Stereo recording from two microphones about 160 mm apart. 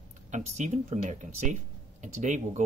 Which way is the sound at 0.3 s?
45° right (ahead or behind).